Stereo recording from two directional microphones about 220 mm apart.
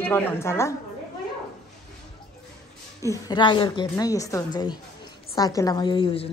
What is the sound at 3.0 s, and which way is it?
A woman's voice, 15° left (ahead or behind).